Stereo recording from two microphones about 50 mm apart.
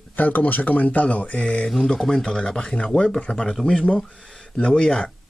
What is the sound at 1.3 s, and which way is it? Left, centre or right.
Speech, centre.